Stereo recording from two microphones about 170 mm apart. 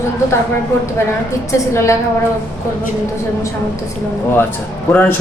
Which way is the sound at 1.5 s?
15° left (ahead or behind).